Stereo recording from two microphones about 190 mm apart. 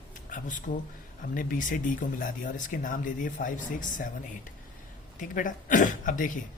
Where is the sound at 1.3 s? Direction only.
45° left (ahead or behind).